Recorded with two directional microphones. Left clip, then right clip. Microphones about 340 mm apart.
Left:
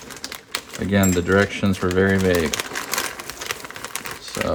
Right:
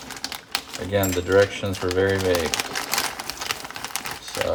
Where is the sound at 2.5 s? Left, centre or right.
Centre.